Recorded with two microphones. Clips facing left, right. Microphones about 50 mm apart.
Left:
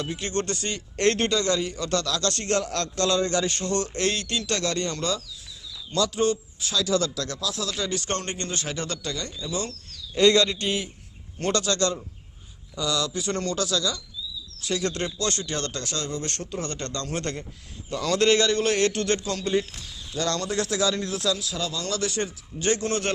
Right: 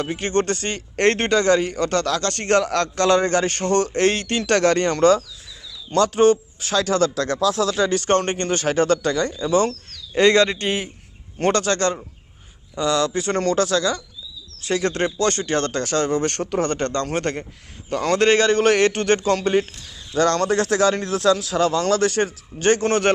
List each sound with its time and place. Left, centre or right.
0.0 s speech: right